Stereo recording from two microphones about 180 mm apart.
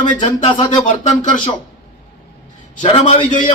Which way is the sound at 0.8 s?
45° left (ahead or behind).